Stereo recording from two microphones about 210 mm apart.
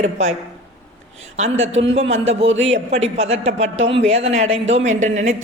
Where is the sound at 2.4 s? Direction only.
65° right (ahead or behind).